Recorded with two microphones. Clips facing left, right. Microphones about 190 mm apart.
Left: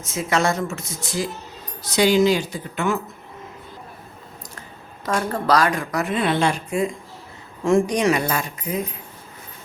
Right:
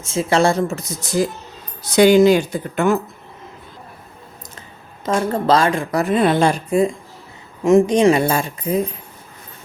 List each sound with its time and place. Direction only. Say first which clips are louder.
0.0 s a woman's voice: right 5 dB; 30° right (ahead or behind)
2.0 s speech: right 6 dB; 55° right (ahead or behind)
5.0 s a woman's voice: right 4 dB; 25° right (ahead or behind)
7.6 s a woman's voice: right 6 dB; 20° right (ahead or behind)